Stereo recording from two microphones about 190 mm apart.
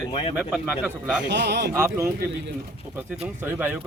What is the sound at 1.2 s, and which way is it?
Speech, 65° right (ahead or behind).